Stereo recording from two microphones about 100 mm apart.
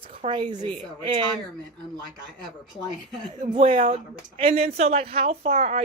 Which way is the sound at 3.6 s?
65° right (ahead or behind).